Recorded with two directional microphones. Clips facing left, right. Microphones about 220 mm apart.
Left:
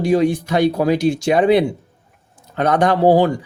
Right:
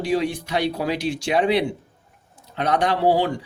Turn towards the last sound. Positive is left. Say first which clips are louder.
# left 6 dB
turn(degrees=45)  # may be behind; listen again after turning